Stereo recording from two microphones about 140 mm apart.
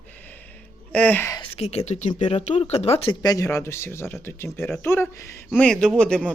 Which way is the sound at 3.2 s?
25° left (ahead or behind).